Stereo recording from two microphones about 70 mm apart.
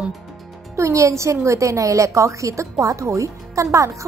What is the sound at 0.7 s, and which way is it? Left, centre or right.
A woman's voice, right.